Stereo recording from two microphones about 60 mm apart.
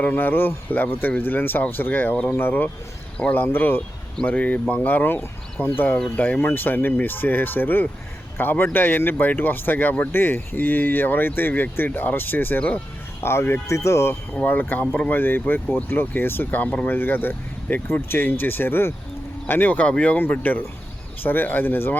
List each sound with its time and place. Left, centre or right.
0.0 s speech: left
4.2 s speech: left
13.2 s speech: left
13.7 s speech: left
14.3 s speech: left